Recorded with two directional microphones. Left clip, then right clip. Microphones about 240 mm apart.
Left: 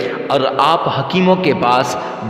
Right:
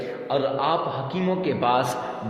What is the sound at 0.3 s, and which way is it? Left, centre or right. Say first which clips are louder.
A man's voice: left 9 dB; left.